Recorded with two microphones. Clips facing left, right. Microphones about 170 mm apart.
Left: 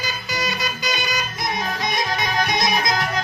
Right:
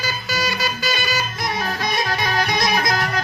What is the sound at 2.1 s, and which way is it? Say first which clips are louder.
Music: right 1 dB; 20° left (ahead or behind).